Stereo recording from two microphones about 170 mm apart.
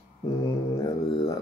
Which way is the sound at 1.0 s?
25° left (ahead or behind).